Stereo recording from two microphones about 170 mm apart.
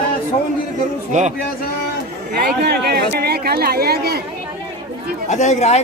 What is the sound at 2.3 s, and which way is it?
A woman's voice, 70° right (ahead or behind).